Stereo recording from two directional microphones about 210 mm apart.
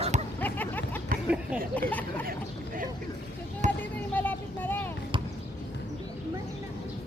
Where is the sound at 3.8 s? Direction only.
10° left (ahead or behind).